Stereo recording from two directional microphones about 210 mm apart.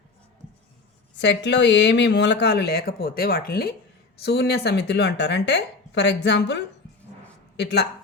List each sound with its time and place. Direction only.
1.2 s a woman's voice: 55° left (ahead or behind)